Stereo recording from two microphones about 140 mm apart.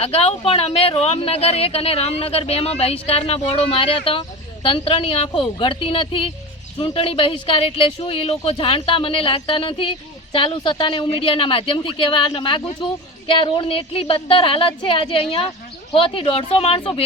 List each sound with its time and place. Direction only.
0.0 s speech: 45° left (ahead or behind)